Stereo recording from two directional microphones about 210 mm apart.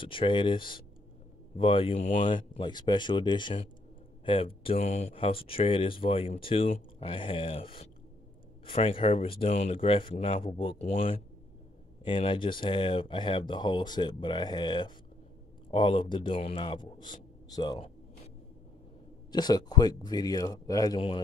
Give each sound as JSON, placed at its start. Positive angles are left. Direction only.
{"t": 0.0, "sound": "speech", "side_deg": 25}
{"t": 19.3, "sound": "speech", "side_deg": 20}